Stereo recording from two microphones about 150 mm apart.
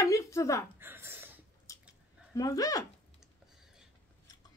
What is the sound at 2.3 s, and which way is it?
Speech, 25° left (ahead or behind).